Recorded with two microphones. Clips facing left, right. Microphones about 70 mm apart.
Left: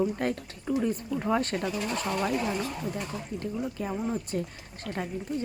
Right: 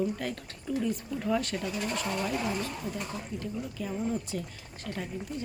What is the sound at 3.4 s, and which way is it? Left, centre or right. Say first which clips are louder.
A woman's voice: left 4 dB; left.